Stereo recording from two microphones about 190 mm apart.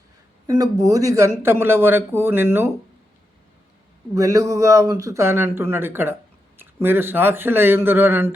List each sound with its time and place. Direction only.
0.4 s speech: 20° right (ahead or behind)
4.1 s speech: 15° right (ahead or behind)